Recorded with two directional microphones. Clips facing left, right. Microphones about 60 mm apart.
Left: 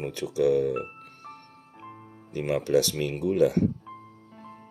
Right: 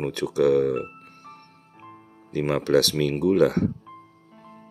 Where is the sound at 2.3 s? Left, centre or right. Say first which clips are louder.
Right 3 dB; right.